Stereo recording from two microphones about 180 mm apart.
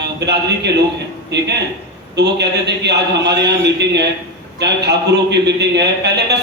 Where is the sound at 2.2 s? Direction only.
70° right (ahead or behind).